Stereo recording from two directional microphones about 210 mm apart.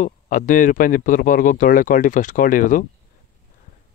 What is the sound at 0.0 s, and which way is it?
Speech, 40° left (ahead or behind).